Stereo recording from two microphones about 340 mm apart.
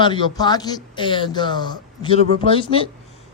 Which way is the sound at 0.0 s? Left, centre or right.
Centre.